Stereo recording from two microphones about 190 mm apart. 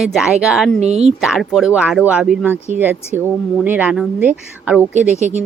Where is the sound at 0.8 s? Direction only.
35° right (ahead or behind).